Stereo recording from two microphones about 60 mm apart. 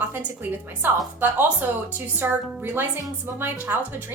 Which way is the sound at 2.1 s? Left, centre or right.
Right.